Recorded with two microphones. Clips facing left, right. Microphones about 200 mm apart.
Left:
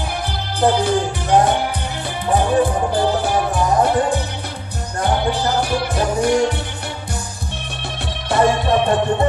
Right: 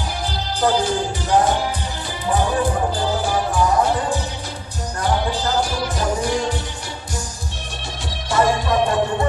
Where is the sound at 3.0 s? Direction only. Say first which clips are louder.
Left 3 dB; 60° left (ahead or behind).